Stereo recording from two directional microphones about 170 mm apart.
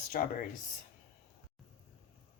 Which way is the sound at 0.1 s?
55° left (ahead or behind).